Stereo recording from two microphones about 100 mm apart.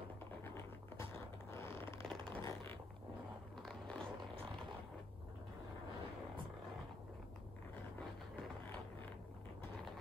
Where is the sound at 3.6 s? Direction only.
5° left (ahead or behind).